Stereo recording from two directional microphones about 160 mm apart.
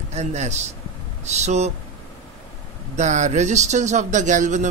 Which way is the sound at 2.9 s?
50° right (ahead or behind).